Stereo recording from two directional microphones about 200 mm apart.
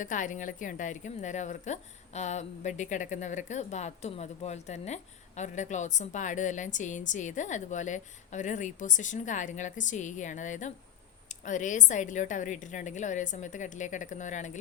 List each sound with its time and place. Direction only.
0.0 s a woman's voice: 40° left (ahead or behind)